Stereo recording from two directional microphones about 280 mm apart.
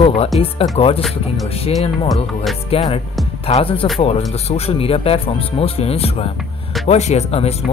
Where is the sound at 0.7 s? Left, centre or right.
Centre.